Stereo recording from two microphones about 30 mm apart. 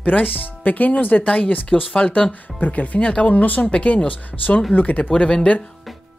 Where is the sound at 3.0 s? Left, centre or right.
Left.